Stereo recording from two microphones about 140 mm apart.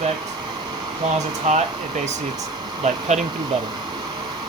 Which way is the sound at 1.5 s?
60° right (ahead or behind).